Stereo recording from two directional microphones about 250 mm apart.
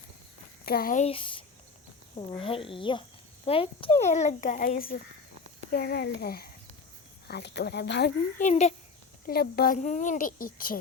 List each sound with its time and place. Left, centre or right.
0.6 s a child's voice: left
8.4 s speech: left
9.2 s a child's voice: left